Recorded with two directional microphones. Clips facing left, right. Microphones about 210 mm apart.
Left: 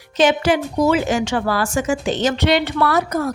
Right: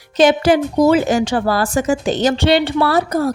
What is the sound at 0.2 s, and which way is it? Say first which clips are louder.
A woman's voice: right 4 dB; 40° right (ahead or behind).